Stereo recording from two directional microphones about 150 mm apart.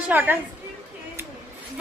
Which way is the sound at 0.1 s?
10° right (ahead or behind).